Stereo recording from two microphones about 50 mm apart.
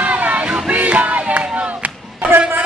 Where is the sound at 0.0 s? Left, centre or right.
Right.